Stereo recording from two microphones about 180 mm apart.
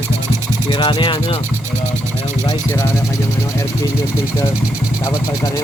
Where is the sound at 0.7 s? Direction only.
25° left (ahead or behind).